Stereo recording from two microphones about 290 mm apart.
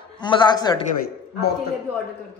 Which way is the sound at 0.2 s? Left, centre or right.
Centre.